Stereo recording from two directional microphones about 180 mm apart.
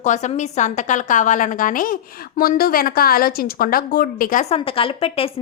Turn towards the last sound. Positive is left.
turn(degrees=30)  # may be behind; listen again after turning